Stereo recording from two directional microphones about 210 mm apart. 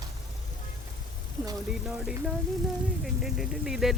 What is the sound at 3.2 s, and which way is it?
Speech, centre (ahead or behind).